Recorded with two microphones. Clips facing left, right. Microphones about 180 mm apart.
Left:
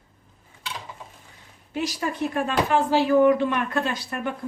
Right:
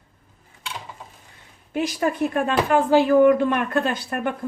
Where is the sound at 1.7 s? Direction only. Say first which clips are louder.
Right 4 dB; 55° right (ahead or behind).